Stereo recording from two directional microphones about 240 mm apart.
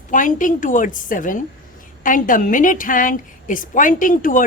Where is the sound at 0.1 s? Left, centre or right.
Left.